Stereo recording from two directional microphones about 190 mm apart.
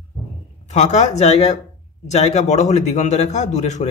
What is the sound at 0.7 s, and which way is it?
A man's voice, 35° left (ahead or behind).